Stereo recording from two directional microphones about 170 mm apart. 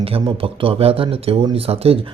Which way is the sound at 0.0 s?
35° right (ahead or behind).